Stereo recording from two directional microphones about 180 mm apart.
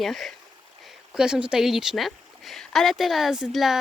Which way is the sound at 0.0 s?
Centre (ahead or behind).